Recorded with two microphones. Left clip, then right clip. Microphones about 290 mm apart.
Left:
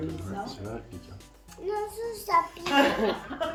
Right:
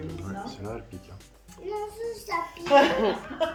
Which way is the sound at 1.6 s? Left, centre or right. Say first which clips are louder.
Left 1 dB; centre.